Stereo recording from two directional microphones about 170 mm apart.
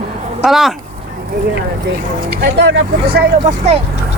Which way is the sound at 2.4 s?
90° right.